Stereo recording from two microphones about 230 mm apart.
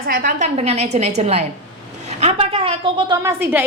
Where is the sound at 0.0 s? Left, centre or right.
Right.